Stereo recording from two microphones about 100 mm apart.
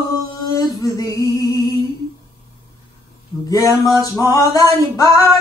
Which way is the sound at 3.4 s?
35° left (ahead or behind).